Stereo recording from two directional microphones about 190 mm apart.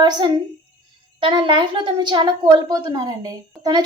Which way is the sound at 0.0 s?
20° right (ahead or behind).